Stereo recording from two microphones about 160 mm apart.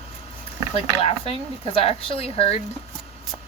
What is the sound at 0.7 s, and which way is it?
Speech, 35° left (ahead or behind).